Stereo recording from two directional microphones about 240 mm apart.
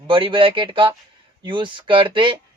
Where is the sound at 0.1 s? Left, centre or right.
Right.